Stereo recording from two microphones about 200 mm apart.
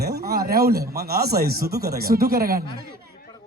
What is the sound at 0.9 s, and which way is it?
Speech, 50° right (ahead or behind).